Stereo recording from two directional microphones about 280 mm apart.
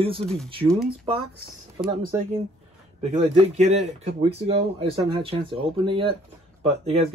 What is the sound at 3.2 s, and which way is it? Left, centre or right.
Speech, right.